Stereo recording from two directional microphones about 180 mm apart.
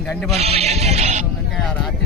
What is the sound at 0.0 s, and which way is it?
Speech, centre (ahead or behind).